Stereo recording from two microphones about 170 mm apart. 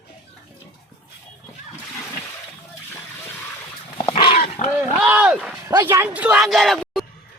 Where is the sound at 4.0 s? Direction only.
30° left (ahead or behind).